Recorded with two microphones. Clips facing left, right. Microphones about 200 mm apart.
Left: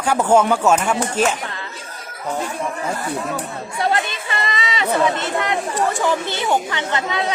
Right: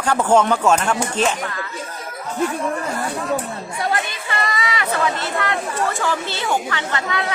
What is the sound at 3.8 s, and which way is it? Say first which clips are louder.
Chatter: left 3 dB; 25° left (ahead or behind).